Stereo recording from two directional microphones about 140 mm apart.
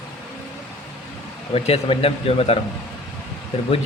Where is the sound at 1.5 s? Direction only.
45° left (ahead or behind).